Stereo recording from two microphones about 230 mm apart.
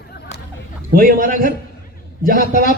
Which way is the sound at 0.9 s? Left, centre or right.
Right.